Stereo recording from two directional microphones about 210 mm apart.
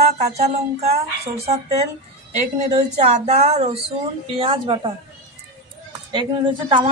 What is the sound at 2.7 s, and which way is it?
Speech, 35° right (ahead or behind).